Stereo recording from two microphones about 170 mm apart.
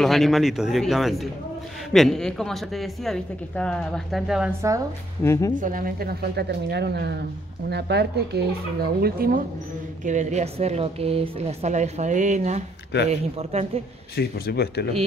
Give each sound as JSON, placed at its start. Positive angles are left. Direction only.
{"t": 0.0, "sound": "a woman's voice", "side_deg": 0}
{"t": 4.5, "sound": "a woman's voice", "side_deg": -15}
{"t": 5.2, "sound": "speech", "side_deg": 15}
{"t": 5.6, "sound": "speech", "side_deg": -55}
{"t": 10.0, "sound": "speech", "side_deg": -45}
{"t": 14.1, "sound": "speech", "side_deg": 70}